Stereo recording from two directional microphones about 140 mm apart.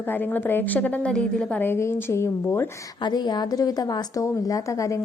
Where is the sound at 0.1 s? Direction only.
15° left (ahead or behind).